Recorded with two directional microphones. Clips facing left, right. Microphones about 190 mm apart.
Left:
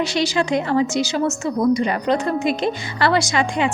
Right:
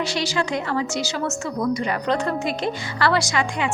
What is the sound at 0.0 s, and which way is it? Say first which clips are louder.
A woman's voice: left 4 dB; 20° left (ahead or behind).